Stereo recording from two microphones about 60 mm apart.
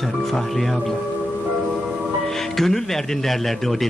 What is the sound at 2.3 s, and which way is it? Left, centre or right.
Speech, centre.